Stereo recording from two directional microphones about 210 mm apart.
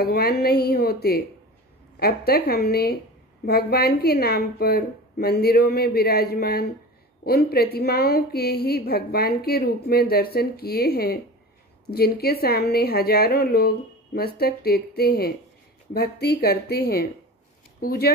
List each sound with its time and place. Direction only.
0.0 s a woman's voice: 45° left (ahead or behind)